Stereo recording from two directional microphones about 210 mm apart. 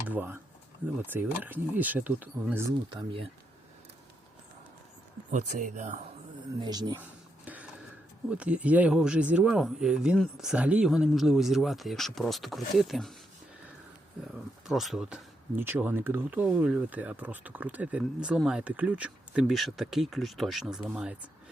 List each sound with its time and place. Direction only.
0.1 s speech: 10° right (ahead or behind)
2.9 s speech: 25° right (ahead or behind)
5.3 s speech: 35° right (ahead or behind)
6.6 s speech: 20° right (ahead or behind)
7.4 s a sound: 5° right (ahead or behind)
8.3 s speech: 5° right (ahead or behind)
14.7 s speech: centre (ahead or behind)